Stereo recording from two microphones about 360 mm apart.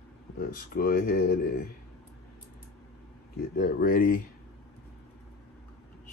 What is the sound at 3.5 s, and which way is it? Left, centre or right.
Speech, left.